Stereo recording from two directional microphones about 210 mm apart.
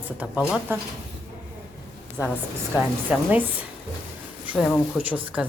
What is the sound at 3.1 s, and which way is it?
Speech, 10° right (ahead or behind).